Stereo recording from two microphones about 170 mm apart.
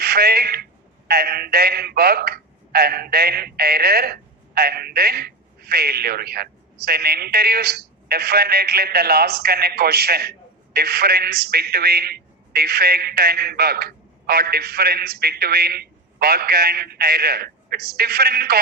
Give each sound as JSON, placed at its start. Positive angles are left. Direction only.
{"t": 0.0, "sound": "speech", "side_deg": -65}